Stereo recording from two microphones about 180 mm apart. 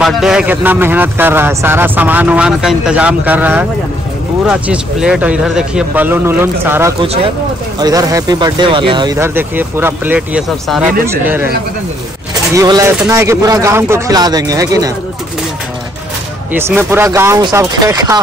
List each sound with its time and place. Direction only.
0.0 s speech: 5° right (ahead or behind)
12.5 s speech: 20° right (ahead or behind)
16.5 s speech: 10° right (ahead or behind)